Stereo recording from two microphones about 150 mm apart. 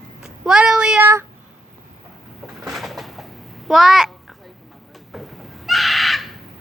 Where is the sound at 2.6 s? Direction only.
Centre (ahead or behind).